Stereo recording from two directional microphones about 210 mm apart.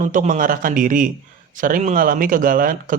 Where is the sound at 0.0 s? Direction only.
35° right (ahead or behind).